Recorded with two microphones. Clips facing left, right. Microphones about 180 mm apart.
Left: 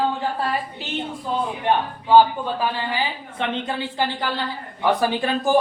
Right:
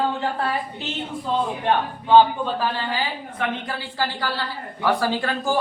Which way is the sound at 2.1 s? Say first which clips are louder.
Even; 10° left (ahead or behind).